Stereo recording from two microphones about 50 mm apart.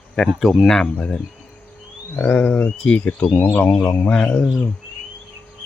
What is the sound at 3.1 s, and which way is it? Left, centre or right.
Speech, centre.